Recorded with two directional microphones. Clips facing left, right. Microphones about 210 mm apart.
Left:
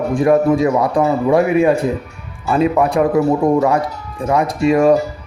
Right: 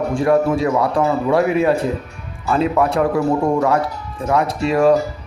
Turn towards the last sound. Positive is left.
turn(degrees=15)  # may be behind; listen again after turning